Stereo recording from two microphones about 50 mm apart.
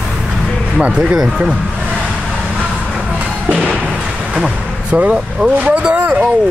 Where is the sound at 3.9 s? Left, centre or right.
Centre.